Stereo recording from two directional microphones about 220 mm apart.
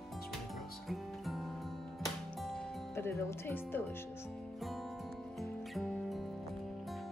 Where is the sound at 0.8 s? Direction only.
Centre (ahead or behind).